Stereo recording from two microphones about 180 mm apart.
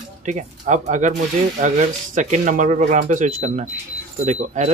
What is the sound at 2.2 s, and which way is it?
Speech, 45° right (ahead or behind).